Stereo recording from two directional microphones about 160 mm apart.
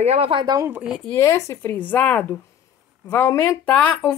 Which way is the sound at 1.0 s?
15° left (ahead or behind).